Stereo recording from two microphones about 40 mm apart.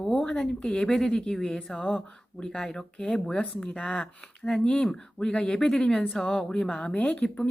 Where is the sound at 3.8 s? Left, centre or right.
Left.